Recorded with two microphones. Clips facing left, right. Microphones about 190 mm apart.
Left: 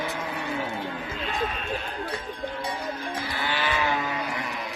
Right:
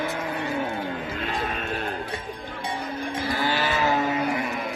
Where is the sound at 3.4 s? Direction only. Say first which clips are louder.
Right 2 dB; 40° right (ahead or behind).